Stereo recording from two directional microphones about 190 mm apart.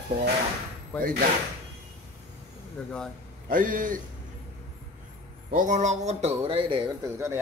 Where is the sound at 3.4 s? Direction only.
45° right (ahead or behind).